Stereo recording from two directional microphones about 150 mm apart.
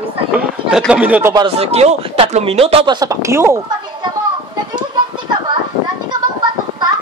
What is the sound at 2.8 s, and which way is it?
Speech, 25° right (ahead or behind).